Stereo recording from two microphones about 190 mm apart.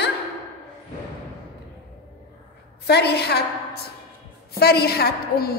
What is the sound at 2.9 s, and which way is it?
A woman's voice, 60° left (ahead or behind).